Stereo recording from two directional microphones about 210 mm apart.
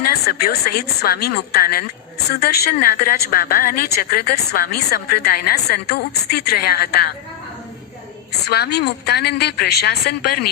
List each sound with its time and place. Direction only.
0.0 s a woman's voice: 45° left (ahead or behind)
8.3 s a woman's voice: 50° left (ahead or behind)